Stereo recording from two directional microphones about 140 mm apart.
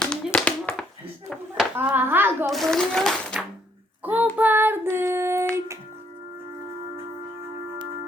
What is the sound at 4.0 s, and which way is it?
Child singing, 10° right (ahead or behind).